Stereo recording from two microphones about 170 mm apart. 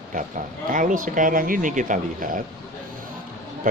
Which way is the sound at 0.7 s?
50° right (ahead or behind).